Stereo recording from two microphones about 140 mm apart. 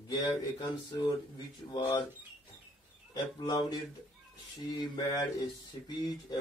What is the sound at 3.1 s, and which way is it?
Speech, 30° left (ahead or behind).